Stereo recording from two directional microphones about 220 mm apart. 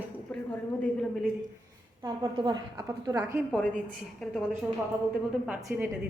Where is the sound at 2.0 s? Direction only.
20° right (ahead or behind).